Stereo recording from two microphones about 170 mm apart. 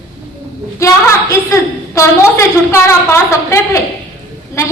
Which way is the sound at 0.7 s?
20° left (ahead or behind).